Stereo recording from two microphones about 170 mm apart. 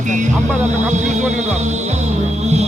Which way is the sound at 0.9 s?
45° right (ahead or behind).